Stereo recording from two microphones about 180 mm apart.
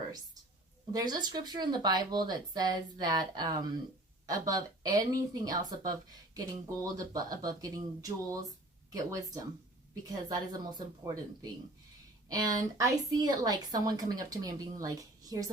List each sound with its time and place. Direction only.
0.9 s speech: 20° right (ahead or behind)